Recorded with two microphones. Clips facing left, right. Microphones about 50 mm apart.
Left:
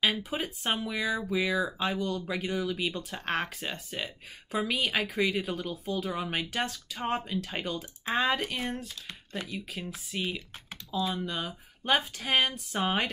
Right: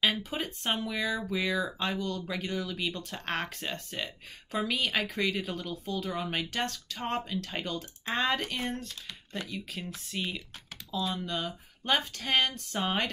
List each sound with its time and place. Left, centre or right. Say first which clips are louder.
0.0 s speech: left 1 dB; centre